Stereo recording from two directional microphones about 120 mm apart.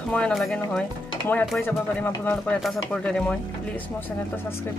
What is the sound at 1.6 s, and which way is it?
Speech, 15° left (ahead or behind).